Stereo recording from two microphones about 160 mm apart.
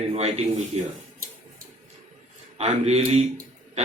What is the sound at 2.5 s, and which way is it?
Speech, 40° right (ahead or behind).